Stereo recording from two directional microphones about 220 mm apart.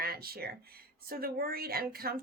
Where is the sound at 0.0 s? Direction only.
45° right (ahead or behind).